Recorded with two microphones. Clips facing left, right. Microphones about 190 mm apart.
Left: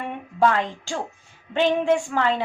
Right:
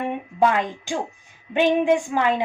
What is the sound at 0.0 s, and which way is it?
A woman's voice, 15° right (ahead or behind).